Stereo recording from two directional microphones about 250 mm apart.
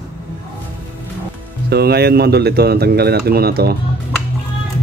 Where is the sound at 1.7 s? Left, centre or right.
Right.